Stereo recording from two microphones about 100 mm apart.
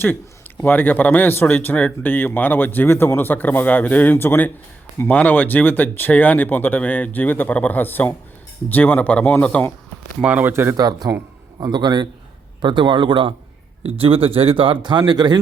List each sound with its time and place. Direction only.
0.0 s speech: 20° left (ahead or behind)
10.2 s speech: 15° right (ahead or behind)
10.5 s speech: 25° right (ahead or behind)
10.8 s a man's voice: 40° right (ahead or behind)